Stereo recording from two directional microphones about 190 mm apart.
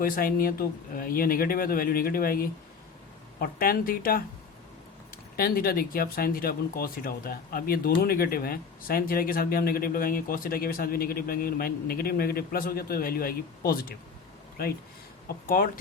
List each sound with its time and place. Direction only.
0.0 s speech: 50° left (ahead or behind)
5.4 s speech: 50° left (ahead or behind)
15.4 s speech: 50° left (ahead or behind)